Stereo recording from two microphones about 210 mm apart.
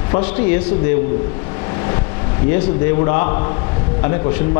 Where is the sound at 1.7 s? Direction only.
20° left (ahead or behind).